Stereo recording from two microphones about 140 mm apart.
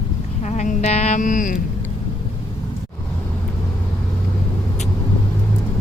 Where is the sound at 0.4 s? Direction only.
60° left (ahead or behind).